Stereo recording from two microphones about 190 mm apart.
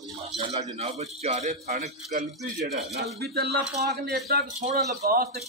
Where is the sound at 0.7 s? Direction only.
35° right (ahead or behind).